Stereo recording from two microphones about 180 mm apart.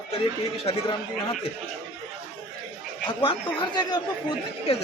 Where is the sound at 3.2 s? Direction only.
25° left (ahead or behind).